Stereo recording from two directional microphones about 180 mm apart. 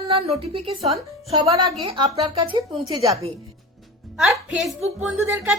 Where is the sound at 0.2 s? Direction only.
35° right (ahead or behind); by 3.2 s 20° right (ahead or behind).